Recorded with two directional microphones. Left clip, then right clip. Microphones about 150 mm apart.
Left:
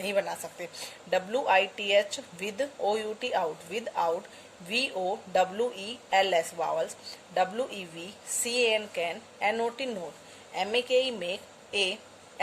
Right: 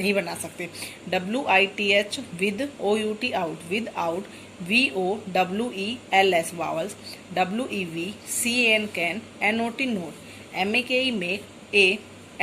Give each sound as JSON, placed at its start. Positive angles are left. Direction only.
{"t": 0.0, "sound": "a woman's voice", "side_deg": 45}